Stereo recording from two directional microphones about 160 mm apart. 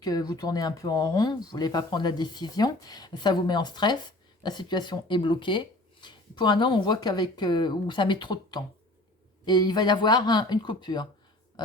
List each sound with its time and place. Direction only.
0.0 s speech: 25° left (ahead or behind)